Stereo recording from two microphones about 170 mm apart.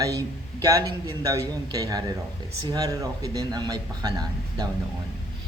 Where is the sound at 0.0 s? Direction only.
20° right (ahead or behind).